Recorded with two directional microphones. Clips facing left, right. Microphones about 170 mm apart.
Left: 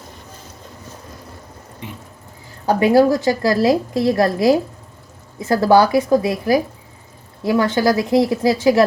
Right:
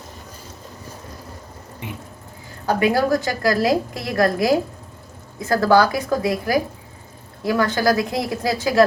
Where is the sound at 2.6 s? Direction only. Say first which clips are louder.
Left 5 dB; 30° left (ahead or behind).